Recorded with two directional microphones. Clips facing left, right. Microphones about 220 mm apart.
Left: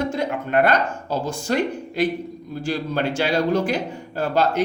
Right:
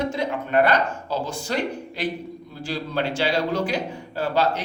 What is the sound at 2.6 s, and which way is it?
Speech, 45° left (ahead or behind).